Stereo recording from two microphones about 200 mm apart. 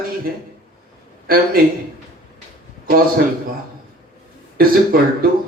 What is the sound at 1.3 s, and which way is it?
Speech, 45° right (ahead or behind).